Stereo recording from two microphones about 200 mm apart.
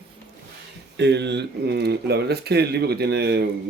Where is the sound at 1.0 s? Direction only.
60° right (ahead or behind).